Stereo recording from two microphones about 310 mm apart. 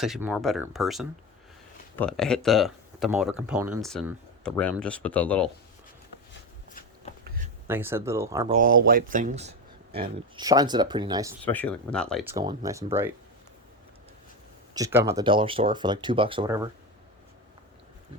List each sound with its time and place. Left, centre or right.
0.0 s speech: centre
7.3 s a sound: right
7.7 s speech: centre
8.5 s speech: right; by 11.3 s centre
11.4 s speech: centre
12.3 s speech: centre
14.7 s speech: centre